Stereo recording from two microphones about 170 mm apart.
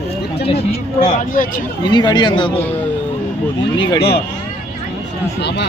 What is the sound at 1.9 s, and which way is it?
Speech, 25° left (ahead or behind).